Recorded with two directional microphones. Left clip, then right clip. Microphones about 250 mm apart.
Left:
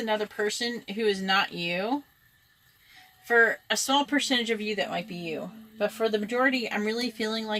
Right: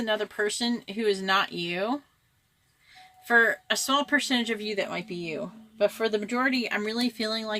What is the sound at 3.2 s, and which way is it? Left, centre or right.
A woman's voice, right.